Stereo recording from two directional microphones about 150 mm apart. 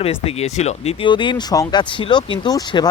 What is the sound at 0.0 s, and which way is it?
Speech, 40° left (ahead or behind).